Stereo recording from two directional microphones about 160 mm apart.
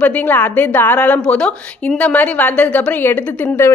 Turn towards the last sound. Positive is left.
turn(degrees=15)  # may be behind; listen again after turning